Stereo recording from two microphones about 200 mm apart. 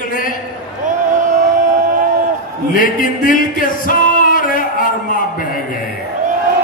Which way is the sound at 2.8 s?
40° left (ahead or behind).